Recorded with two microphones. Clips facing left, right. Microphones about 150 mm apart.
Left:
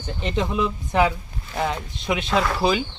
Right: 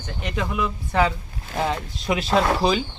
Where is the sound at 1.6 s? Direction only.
Centre (ahead or behind).